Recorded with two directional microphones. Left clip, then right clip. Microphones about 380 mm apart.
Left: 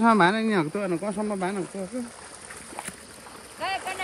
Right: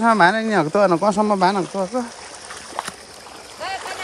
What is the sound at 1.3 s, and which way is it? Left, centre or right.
Speech, centre.